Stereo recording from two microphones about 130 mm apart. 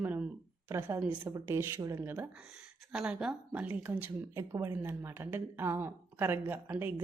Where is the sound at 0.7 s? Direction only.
20° right (ahead or behind).